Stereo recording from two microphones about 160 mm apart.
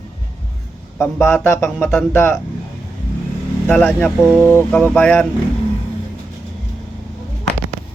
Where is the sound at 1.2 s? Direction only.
15° left (ahead or behind).